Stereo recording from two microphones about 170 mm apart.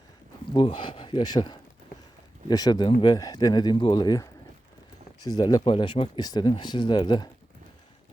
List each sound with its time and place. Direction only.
0.5 s speech: 30° left (ahead or behind)